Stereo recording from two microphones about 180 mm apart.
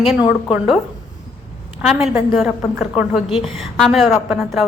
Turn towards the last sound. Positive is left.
turn(degrees=0)  # may be behind; listen again after turning